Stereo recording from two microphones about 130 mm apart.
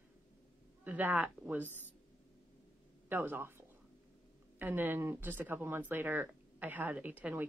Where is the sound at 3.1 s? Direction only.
15° right (ahead or behind).